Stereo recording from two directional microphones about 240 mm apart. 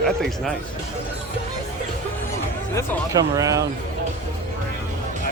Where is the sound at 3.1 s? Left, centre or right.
Centre.